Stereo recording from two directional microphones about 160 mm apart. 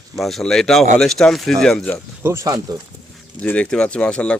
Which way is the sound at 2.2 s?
15° right (ahead or behind).